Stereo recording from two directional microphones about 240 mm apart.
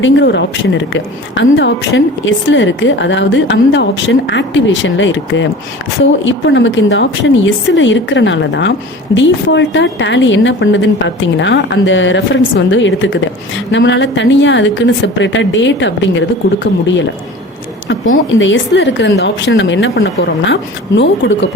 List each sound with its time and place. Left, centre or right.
0.0 s a woman's voice: left
17.8 s a woman's voice: left